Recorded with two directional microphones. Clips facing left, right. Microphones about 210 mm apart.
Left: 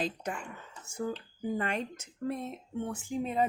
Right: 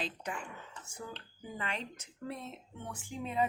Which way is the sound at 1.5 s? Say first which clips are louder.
Left 5 dB; 50° left (ahead or behind).